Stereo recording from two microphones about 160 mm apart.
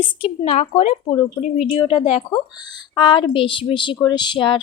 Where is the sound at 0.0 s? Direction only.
35° left (ahead or behind).